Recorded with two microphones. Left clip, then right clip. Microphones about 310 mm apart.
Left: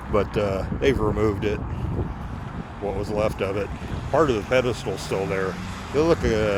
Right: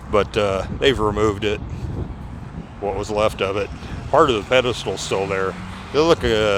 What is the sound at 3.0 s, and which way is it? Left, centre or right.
Speech, right.